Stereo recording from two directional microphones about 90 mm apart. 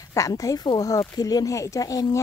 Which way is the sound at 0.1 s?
40° left (ahead or behind).